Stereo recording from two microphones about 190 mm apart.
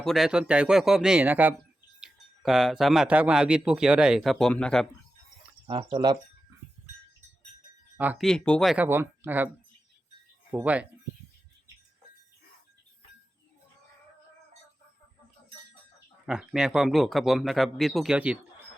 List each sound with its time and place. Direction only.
0.0 s speech: centre (ahead or behind)
5.6 s speech: 25° right (ahead or behind)
7.9 s speech: 10° right (ahead or behind)
8.3 s speech: 5° left (ahead or behind)
8.7 s speech: 10° right (ahead or behind)
10.5 s speech: 5° right (ahead or behind)
16.2 s speech: centre (ahead or behind)